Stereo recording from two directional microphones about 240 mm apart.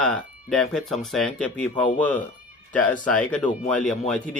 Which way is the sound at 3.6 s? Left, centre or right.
Centre.